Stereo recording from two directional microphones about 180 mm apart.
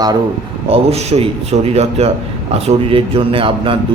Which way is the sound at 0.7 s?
35° right (ahead or behind).